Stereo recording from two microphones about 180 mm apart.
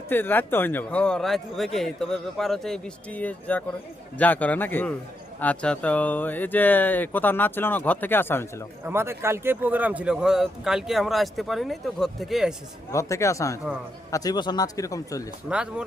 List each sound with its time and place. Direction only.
0.1 s speech: 10° left (ahead or behind)
8.9 s speech: 15° right (ahead or behind)
12.9 s speech: 15° left (ahead or behind)
15.4 s speech: 5° right (ahead or behind)